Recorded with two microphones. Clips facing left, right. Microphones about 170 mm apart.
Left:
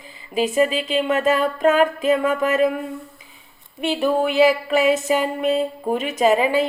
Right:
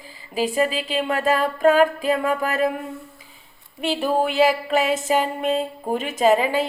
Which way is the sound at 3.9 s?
35° right (ahead or behind).